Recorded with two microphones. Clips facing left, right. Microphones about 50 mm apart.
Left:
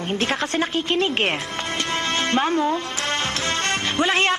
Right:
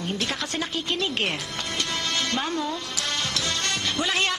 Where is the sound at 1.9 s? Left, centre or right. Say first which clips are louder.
Left 7 dB; left.